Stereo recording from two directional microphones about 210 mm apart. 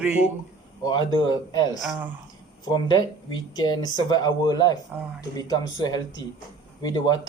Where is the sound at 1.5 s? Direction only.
20° left (ahead or behind).